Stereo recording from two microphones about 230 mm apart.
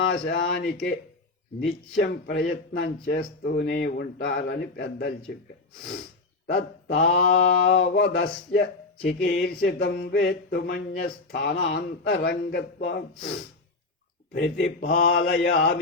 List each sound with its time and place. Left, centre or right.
0.1 s speech: left
6.5 s speech: left
14.3 s speech: left